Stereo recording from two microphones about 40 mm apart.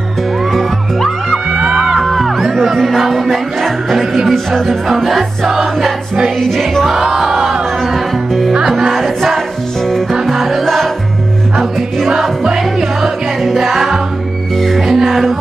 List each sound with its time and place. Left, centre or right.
0.5 s music: centre
1.5 s music: centre
2.0 s music: centre
6.9 s music: centre
13.0 s music: centre